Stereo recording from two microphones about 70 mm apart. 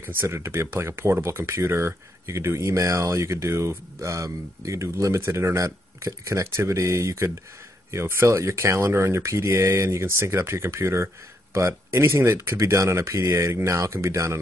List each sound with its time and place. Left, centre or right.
0.0 s speech: right